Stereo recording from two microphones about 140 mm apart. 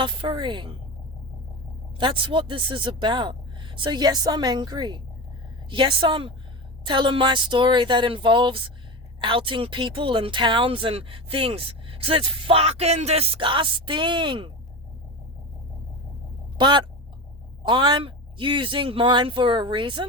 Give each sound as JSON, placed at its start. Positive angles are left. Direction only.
{"t": 0.0, "sound": "speech", "side_deg": -35}
{"t": 2.0, "sound": "speech", "side_deg": -35}
{"t": 16.6, "sound": "speech", "side_deg": -35}